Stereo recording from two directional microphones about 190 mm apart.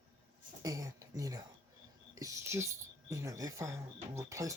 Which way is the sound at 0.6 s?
20° right (ahead or behind).